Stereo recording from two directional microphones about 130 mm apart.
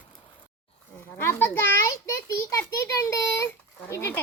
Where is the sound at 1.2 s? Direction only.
15° left (ahead or behind).